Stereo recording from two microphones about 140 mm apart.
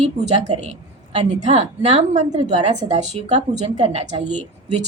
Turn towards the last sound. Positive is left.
turn(degrees=-55)  # may be behind; listen again after turning